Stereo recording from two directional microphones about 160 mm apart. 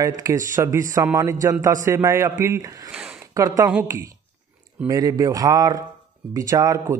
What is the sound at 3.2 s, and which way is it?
Speech, 20° right (ahead or behind).